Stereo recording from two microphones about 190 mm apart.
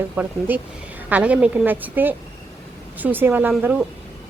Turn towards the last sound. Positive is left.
turn(degrees=-10)  # may be behind; listen again after turning